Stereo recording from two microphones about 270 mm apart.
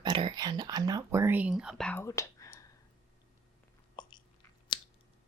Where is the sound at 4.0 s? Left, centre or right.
Centre.